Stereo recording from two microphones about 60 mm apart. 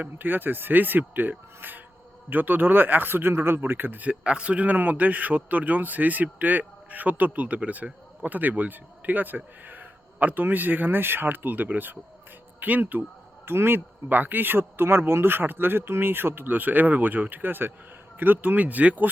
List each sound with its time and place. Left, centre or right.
0.0 s a man's voice: right